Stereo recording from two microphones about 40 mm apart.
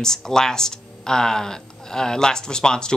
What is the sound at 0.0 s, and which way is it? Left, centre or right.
A man's voice, centre.